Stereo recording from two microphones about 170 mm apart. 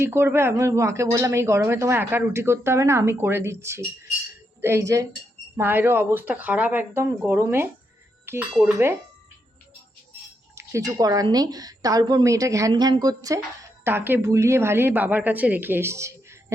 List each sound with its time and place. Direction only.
0.0 s speech: 15° right (ahead or behind)
10.5 s a woman's voice: 15° right (ahead or behind)